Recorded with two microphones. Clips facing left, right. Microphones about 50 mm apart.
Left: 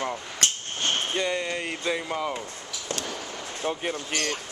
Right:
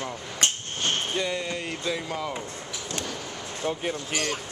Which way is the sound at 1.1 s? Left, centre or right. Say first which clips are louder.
Left 1 dB; centre.